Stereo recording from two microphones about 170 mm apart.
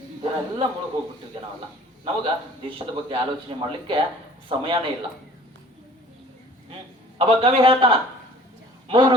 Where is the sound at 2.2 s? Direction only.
30° right (ahead or behind).